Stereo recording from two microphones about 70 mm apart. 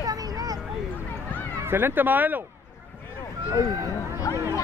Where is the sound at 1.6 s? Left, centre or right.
Right.